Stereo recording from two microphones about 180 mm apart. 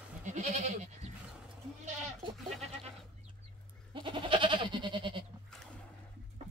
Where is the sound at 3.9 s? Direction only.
25° right (ahead or behind).